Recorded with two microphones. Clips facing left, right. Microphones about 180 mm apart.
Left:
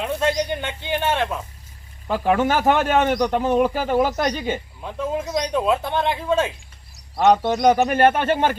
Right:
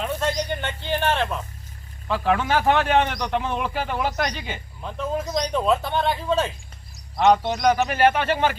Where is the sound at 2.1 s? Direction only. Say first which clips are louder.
Left 3 dB; 45° left (ahead or behind).